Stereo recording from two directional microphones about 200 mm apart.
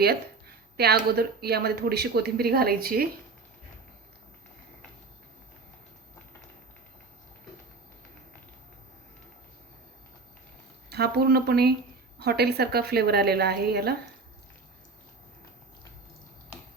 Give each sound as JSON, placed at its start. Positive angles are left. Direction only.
{"t": 0.0, "sound": "speech", "side_deg": -50}
{"t": 10.8, "sound": "speech", "side_deg": -55}